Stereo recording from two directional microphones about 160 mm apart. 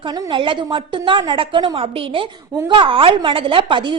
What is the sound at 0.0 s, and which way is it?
A woman's voice, 30° right (ahead or behind).